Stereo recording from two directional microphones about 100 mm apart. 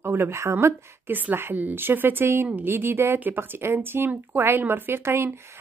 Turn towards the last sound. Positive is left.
turn(degrees=-25)  # may be behind; listen again after turning